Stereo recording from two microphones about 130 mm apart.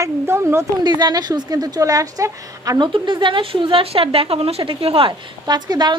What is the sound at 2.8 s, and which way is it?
Speech, 35° right (ahead or behind).